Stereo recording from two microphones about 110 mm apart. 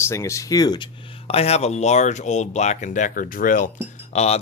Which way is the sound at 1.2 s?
65° left (ahead or behind).